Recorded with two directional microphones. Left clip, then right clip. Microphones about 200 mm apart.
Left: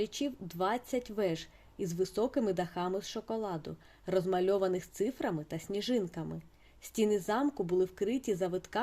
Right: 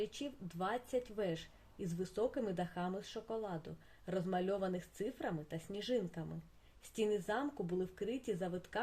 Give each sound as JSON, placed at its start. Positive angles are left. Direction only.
{"t": 0.0, "sound": "speech", "side_deg": 40}